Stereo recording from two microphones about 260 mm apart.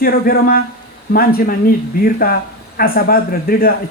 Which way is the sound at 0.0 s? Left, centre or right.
Left.